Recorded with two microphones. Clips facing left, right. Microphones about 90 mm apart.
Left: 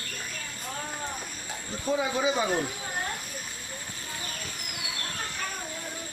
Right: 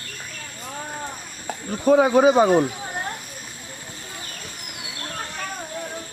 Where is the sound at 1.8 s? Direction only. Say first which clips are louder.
Right 12 dB; 55° right (ahead or behind).